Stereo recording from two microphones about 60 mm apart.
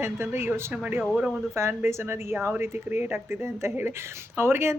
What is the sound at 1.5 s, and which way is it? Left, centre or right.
A woman's voice, right.